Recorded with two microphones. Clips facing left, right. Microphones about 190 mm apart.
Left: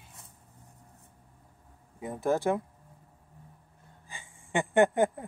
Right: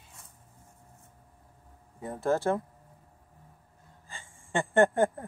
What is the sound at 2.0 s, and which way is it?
Speech, 15° left (ahead or behind).